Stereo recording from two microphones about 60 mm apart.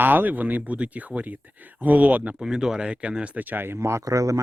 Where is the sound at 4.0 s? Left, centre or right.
Right.